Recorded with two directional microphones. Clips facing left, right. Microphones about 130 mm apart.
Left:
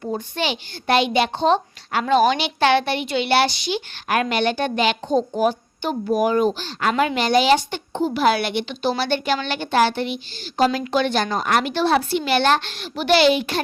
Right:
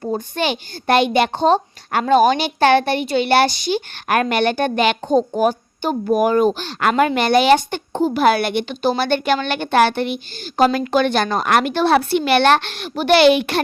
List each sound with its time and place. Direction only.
0.3 s a child's voice: 50° right (ahead or behind)
6.9 s a child's voice: 50° right (ahead or behind)